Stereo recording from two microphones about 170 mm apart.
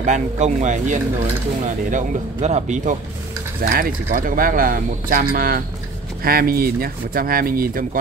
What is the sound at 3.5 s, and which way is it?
Speech, 60° right (ahead or behind).